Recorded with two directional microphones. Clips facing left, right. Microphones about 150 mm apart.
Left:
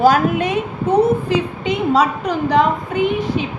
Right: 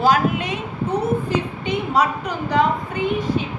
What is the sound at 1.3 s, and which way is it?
Speech, 90° left.